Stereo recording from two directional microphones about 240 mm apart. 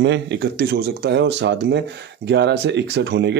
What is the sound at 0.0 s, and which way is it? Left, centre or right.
Speech, right.